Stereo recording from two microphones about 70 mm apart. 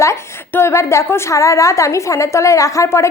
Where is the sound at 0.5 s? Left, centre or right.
Left.